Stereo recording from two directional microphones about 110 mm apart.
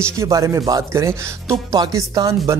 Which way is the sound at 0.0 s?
30° right (ahead or behind).